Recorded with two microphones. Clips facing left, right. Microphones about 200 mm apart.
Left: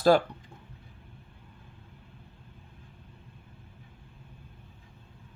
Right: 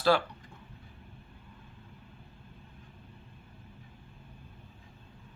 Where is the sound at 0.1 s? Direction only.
45° left (ahead or behind).